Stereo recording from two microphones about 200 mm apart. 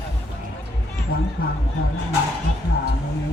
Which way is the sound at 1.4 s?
50° left (ahead or behind).